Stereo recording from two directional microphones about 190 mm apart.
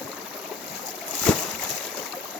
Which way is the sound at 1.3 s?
5° left (ahead or behind).